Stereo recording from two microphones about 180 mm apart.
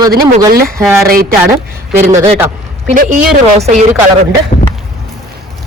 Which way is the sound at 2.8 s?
45° right (ahead or behind).